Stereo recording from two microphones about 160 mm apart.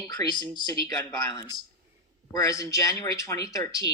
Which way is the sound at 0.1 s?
25° left (ahead or behind).